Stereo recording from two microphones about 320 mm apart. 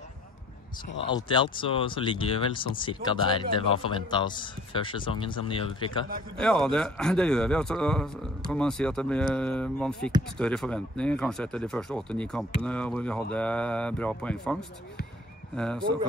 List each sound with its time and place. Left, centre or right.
1.1 s a man's voice: centre
6.3 s speech: centre